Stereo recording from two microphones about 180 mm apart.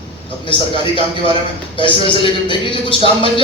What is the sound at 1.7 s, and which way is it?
Speech, 30° left (ahead or behind).